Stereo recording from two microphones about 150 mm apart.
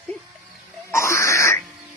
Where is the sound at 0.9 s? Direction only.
20° left (ahead or behind).